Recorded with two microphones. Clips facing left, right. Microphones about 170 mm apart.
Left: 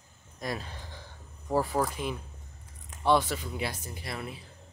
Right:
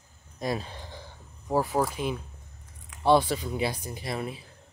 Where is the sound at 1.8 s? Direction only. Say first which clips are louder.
Right 2 dB; 5° right (ahead or behind).